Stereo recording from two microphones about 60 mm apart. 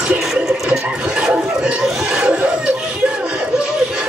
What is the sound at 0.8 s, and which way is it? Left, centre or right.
Chuckle, centre.